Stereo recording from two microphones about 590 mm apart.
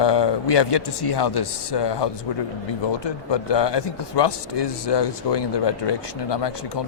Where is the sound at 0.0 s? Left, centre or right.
Left.